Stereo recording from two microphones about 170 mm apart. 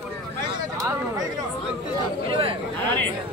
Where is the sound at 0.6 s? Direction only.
20° right (ahead or behind).